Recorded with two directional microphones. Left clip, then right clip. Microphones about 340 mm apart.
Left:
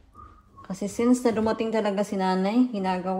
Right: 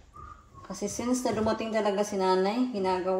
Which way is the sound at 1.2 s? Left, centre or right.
Left.